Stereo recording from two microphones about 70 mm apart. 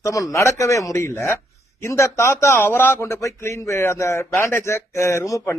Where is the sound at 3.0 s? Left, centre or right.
Left.